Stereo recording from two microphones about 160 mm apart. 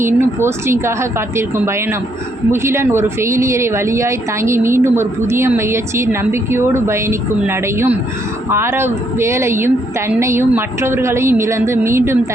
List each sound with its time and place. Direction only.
0.0 s a woman's voice: 15° right (ahead or behind)